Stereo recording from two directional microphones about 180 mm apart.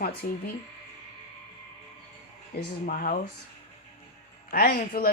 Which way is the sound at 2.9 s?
50° left (ahead or behind).